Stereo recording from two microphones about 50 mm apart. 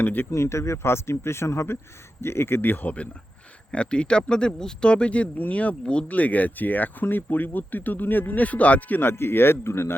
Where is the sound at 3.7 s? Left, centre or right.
Left.